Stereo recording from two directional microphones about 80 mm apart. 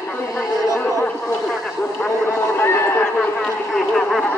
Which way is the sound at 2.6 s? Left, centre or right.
Left.